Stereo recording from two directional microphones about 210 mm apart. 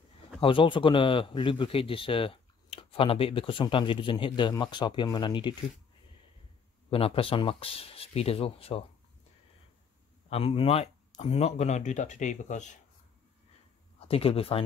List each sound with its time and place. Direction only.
0.4 s speech: 25° left (ahead or behind)
6.9 s speech: 25° left (ahead or behind)
10.3 s speech: 25° left (ahead or behind)
13.9 s speech: 25° left (ahead or behind)